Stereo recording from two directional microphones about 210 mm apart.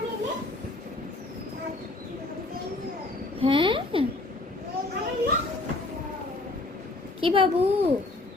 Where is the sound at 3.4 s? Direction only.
25° right (ahead or behind).